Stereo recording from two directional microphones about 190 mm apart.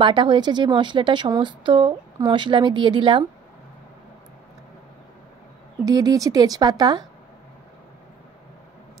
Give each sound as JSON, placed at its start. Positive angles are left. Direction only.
{"t": 0.0, "sound": "a woman's voice", "side_deg": -25}
{"t": 5.9, "sound": "a woman's voice", "side_deg": -20}